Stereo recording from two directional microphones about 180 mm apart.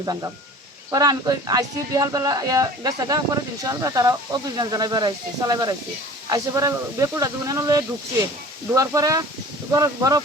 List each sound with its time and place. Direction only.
0.0 s speech: 20° right (ahead or behind)